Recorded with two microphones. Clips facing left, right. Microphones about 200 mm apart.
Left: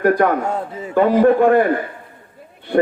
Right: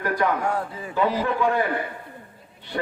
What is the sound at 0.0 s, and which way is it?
Speech, 55° left (ahead or behind).